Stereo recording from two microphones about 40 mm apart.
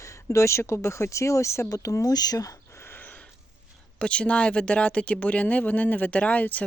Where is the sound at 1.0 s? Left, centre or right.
Left.